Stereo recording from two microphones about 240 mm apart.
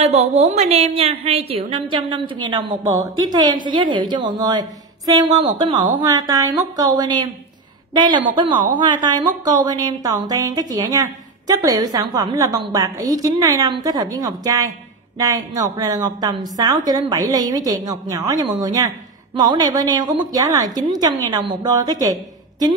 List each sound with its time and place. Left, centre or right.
0.0 s a woman's voice: right